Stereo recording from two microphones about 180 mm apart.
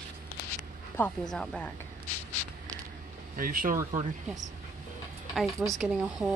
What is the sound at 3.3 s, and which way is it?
Speech, 50° right (ahead or behind).